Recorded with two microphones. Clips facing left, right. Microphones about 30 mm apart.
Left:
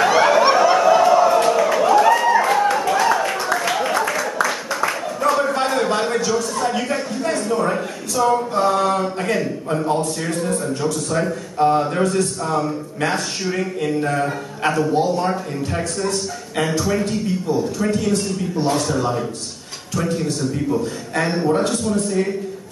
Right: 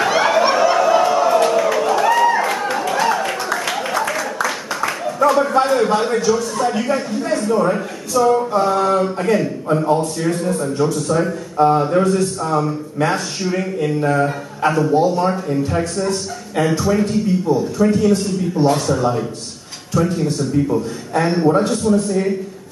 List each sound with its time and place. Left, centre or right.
0.0 s a sound: centre
5.6 s a man's voice: centre
16.8 s a man's voice: centre